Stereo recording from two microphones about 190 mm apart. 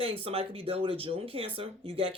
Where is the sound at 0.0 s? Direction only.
30° right (ahead or behind).